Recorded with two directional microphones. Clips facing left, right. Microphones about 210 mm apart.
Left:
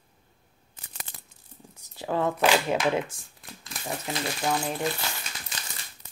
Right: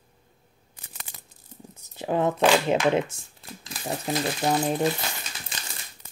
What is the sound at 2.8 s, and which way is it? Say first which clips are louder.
Speech: right 3 dB; 25° right (ahead or behind).